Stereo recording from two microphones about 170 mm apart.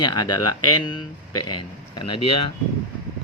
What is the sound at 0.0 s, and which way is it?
Speech, 25° left (ahead or behind).